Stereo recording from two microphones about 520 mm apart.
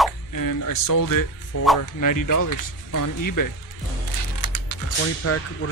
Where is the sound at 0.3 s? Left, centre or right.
Left.